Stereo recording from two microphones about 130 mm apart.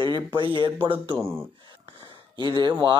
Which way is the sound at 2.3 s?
35° right (ahead or behind).